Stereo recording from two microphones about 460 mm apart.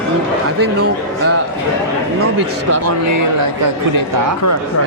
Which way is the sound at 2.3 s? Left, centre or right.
Right.